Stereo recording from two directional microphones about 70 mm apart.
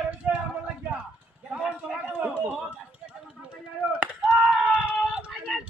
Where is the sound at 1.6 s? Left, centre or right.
Centre.